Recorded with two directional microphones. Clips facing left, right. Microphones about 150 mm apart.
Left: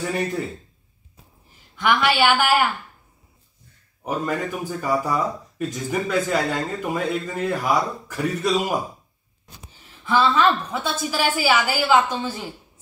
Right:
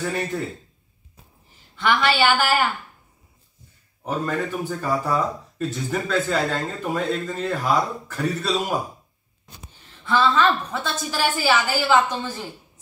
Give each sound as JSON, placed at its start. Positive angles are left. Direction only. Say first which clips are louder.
{"t": 1.8, "sound": "speech", "louder": "left 1 dB", "side_deg": 10}
{"t": 4.0, "sound": "speech", "louder": "even", "side_deg": 10}
{"t": 10.0, "sound": "speech", "louder": "left 1 dB", "side_deg": 10}